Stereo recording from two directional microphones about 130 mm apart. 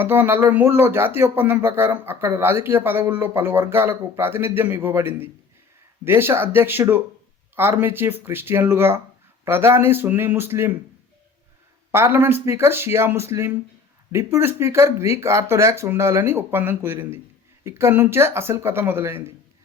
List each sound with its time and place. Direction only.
0.0 s speech: 15° right (ahead or behind)
11.9 s speech: 20° right (ahead or behind)